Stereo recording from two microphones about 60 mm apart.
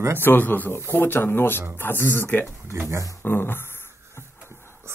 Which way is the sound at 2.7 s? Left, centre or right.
Right.